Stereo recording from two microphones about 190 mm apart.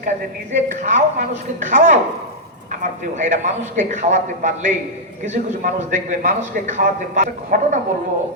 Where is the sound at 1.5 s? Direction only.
40° right (ahead or behind).